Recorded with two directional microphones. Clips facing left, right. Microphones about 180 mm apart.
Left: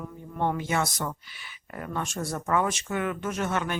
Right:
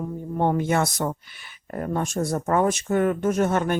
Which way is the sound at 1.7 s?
40° right (ahead or behind).